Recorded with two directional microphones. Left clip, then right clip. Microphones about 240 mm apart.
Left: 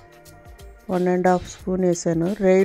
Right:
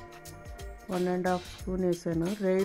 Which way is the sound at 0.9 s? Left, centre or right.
Left.